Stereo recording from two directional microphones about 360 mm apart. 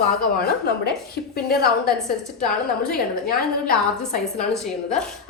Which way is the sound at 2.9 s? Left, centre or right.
Left.